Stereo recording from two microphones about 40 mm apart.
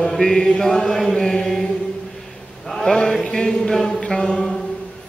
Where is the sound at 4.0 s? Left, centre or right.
Centre.